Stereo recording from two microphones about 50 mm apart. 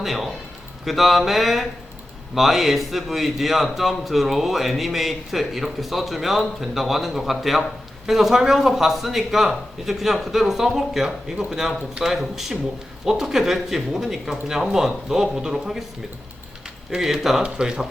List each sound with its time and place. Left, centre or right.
0.0 s a man's voice: centre
17.0 s speech: centre